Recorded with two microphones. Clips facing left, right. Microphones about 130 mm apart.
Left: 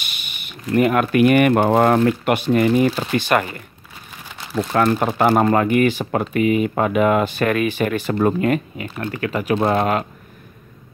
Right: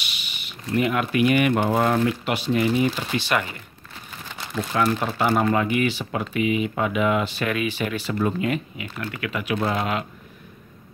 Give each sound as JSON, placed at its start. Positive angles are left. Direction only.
{"t": 0.0, "sound": "speech", "side_deg": 50}
{"t": 4.7, "sound": "speech", "side_deg": 50}